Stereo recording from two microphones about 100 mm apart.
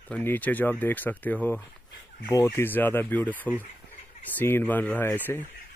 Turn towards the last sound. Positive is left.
turn(degrees=20)  # may be behind; listen again after turning